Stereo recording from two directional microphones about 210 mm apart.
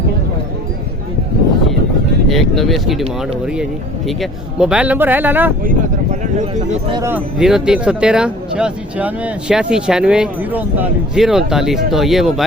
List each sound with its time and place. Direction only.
2.3 s speech: centre (ahead or behind)
6.8 s speech: 20° right (ahead or behind)
7.1 s speech: 5° right (ahead or behind)